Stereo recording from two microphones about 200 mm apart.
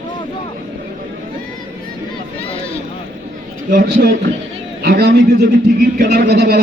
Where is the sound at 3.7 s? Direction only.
45° right (ahead or behind).